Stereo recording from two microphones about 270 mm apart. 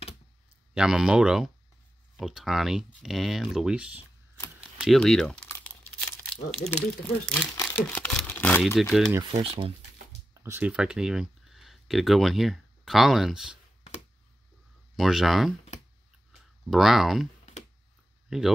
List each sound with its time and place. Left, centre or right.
0.7 s speech: centre
4.6 s crumpling: centre
6.5 s speech: centre
9.4 s speech: centre
10.3 s speech: centre
15.0 s speech: centre
16.3 s a sound: centre